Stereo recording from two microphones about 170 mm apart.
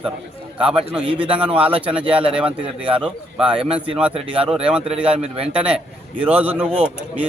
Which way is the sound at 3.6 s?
35° right (ahead or behind).